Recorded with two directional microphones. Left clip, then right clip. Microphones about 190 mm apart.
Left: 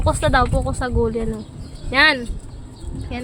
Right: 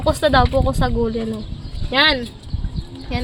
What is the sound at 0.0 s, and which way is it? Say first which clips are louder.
A woman's voice: right 2 dB; 15° right (ahead or behind).